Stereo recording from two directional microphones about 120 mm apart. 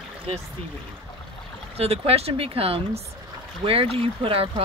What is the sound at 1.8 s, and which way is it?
Speech, 55° right (ahead or behind).